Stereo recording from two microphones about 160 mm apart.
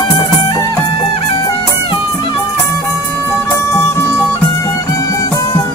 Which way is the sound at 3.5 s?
15° left (ahead or behind).